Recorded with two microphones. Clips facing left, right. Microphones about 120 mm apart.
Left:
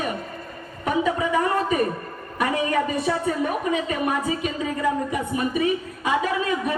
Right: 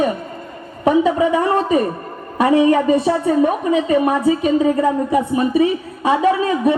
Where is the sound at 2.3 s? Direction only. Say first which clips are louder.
Right 9 dB; 30° right (ahead or behind).